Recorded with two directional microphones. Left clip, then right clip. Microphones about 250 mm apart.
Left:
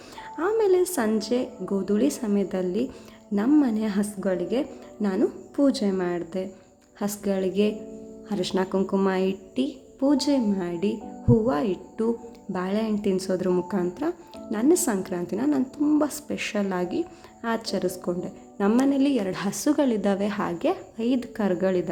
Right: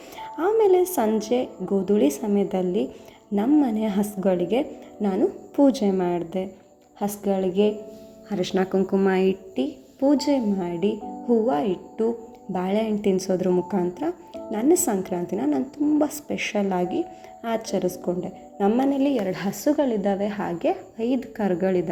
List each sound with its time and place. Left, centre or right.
0.2 s a woman's voice: centre